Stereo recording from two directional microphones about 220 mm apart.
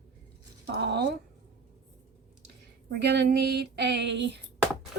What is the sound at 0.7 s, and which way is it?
Speech, 50° right (ahead or behind).